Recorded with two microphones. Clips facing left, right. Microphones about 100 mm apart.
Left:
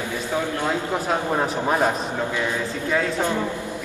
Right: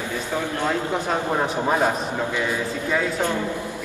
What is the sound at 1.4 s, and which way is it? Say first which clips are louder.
Speech: even; centre (ahead or behind).